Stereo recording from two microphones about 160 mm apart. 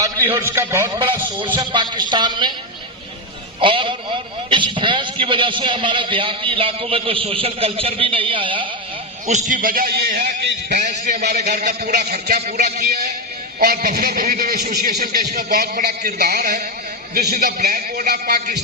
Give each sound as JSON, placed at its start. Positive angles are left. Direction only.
{"t": 0.0, "sound": "a man's voice", "side_deg": -15}
{"t": 0.9, "sound": "a man's voice", "side_deg": -30}
{"t": 3.6, "sound": "a man's voice", "side_deg": -35}
{"t": 9.2, "sound": "a man's voice", "side_deg": -50}
{"t": 10.8, "sound": "a man's voice", "side_deg": -50}
{"t": 11.4, "sound": "a man's voice", "side_deg": -75}
{"t": 15.3, "sound": "a man's voice", "side_deg": -55}
{"t": 17.2, "sound": "a man's voice", "side_deg": -75}